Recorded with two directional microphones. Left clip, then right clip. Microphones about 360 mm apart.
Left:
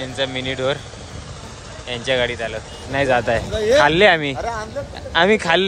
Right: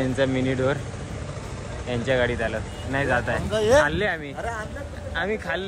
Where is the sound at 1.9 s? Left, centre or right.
Centre.